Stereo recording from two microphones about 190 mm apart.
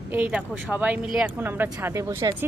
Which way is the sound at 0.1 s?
5° right (ahead or behind).